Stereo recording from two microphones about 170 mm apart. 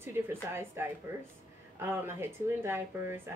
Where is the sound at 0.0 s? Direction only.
15° right (ahead or behind).